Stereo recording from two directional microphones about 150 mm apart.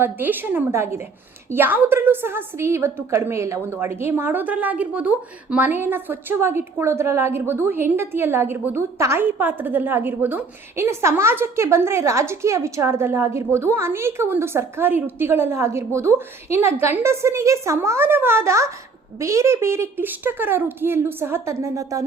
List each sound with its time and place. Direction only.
0.0 s a woman's voice: 15° right (ahead or behind)